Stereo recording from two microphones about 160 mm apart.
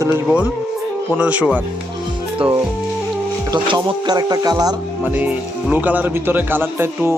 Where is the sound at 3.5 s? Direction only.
25° right (ahead or behind).